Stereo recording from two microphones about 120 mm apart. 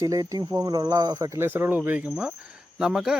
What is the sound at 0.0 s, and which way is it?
Speech, 30° right (ahead or behind).